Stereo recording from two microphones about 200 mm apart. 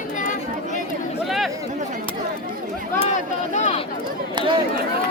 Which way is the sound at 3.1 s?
35° left (ahead or behind).